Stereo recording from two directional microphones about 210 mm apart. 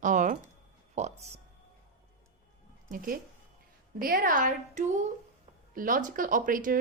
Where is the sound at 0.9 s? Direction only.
30° right (ahead or behind).